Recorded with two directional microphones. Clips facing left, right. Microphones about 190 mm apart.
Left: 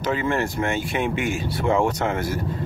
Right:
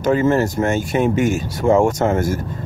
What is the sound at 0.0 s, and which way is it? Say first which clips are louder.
Speech: right 7 dB; 45° right (ahead or behind).